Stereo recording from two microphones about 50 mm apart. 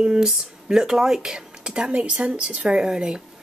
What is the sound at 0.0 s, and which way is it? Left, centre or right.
A woman's voice, centre.